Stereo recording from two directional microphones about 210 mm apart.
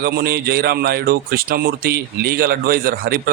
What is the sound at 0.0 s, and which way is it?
Speech, 50° right (ahead or behind).